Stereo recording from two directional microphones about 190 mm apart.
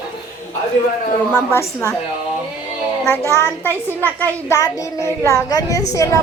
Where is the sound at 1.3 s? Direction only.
15° left (ahead or behind).